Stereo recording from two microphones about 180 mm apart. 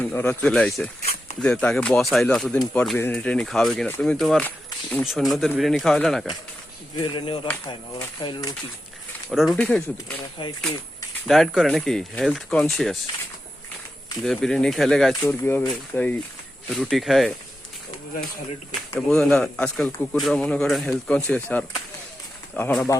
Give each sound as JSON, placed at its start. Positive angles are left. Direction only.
{"t": 0.0, "sound": "speech", "side_deg": 10}
{"t": 7.0, "sound": "speech", "side_deg": 30}
{"t": 9.3, "sound": "speech", "side_deg": 0}
{"t": 10.4, "sound": "speech", "side_deg": 30}
{"t": 11.3, "sound": "speech", "side_deg": 0}
{"t": 14.3, "sound": "speech", "side_deg": 5}
{"t": 18.9, "sound": "speech", "side_deg": 0}